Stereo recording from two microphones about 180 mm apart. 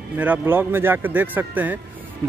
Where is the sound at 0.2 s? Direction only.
10° right (ahead or behind).